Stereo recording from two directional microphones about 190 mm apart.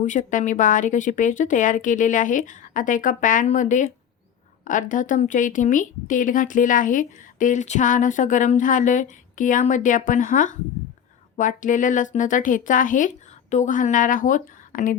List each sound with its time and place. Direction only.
0.0 s a woman's voice: 40° left (ahead or behind)